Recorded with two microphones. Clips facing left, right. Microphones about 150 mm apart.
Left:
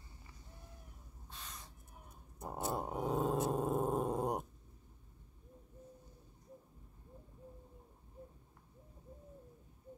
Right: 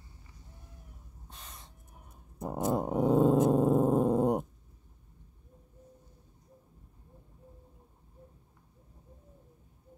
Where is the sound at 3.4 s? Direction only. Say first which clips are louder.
Right 10 dB; 35° right (ahead or behind).